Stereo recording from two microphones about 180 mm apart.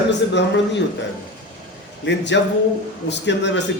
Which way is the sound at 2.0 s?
80° left.